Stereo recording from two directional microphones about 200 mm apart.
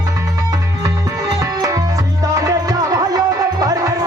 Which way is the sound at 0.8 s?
20° right (ahead or behind).